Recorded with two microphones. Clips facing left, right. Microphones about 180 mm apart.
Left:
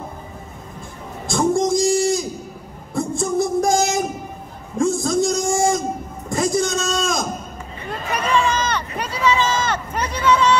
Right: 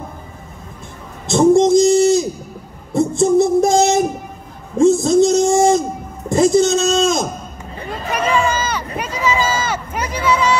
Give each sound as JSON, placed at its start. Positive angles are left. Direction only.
{"t": 1.2, "sound": "speech", "side_deg": -25}
{"t": 2.9, "sound": "child singing", "side_deg": -25}
{"t": 4.7, "sound": "a man's voice", "side_deg": -25}
{"t": 8.2, "sound": "a sound", "side_deg": -5}